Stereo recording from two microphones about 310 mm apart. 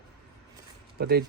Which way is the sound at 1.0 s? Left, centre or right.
Right.